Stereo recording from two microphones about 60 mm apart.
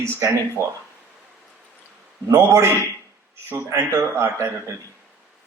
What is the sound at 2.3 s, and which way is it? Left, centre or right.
A man's voice, right.